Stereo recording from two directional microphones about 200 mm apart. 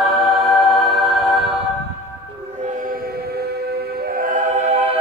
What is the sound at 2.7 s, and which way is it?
Choir, 45° right (ahead or behind).